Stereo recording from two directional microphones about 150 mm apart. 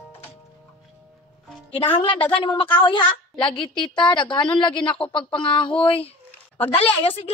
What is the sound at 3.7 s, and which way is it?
Speech, 5° left (ahead or behind).